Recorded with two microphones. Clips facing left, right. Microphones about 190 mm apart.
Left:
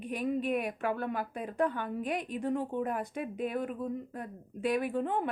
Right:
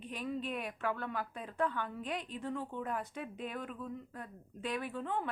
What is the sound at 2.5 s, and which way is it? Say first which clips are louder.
Speech: left 8 dB; 45° left (ahead or behind).